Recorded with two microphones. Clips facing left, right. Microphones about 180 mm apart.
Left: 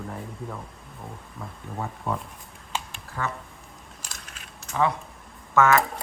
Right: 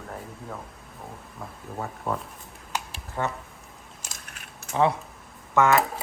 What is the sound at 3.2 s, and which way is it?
Speech, 25° right (ahead or behind).